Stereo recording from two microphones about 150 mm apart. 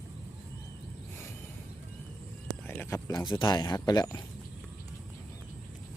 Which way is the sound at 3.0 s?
30° left (ahead or behind).